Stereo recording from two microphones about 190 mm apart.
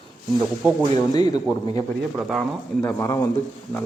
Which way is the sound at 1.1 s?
20° left (ahead or behind).